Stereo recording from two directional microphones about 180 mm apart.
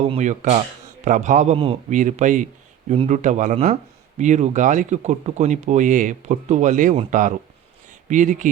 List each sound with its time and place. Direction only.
0.0 s speech: 40° right (ahead or behind)